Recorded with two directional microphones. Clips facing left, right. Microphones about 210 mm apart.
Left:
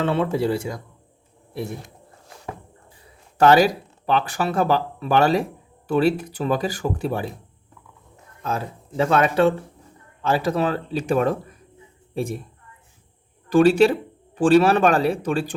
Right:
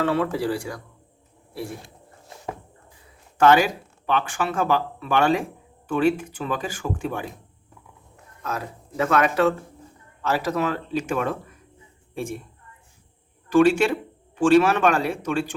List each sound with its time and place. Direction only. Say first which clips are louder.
0.0 s speech: left 2 dB; 25° left (ahead or behind)
3.3 s a woman's voice: left 2 dB; 35° left (ahead or behind)
13.5 s speech: left 2 dB; 35° left (ahead or behind)